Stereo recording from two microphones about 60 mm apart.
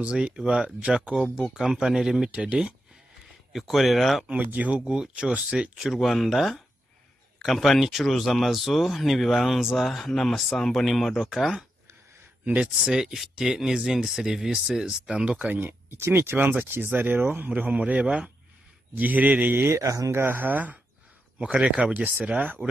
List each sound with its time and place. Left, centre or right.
0.0 s speech: centre
3.5 s speech: centre
4.4 s speech: right
5.8 s speech: centre
11.2 s speech: centre
15.4 s speech: right
17.6 s speech: right
19.6 s speech: right
20.1 s speech: right